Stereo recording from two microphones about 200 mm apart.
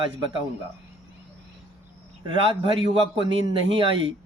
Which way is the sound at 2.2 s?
25° right (ahead or behind).